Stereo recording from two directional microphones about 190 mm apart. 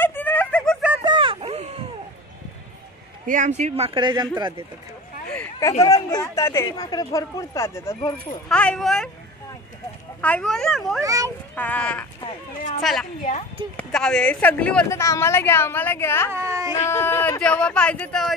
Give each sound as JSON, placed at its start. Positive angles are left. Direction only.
{"t": 0.0, "sound": "a sound", "side_deg": 10}
{"t": 1.0, "sound": "a sound", "side_deg": -25}
{"t": 3.3, "sound": "speech", "side_deg": -40}
{"t": 5.3, "sound": "speech", "side_deg": 10}
{"t": 8.5, "sound": "a child's voice", "side_deg": 5}
{"t": 10.2, "sound": "a child's voice", "side_deg": 5}
{"t": 11.0, "sound": "a child's voice", "side_deg": -15}
{"t": 11.5, "sound": "speech", "side_deg": 10}
{"t": 13.7, "sound": "speech", "side_deg": 5}
{"t": 16.3, "sound": "speech", "side_deg": -15}
{"t": 16.9, "sound": "speech", "side_deg": 10}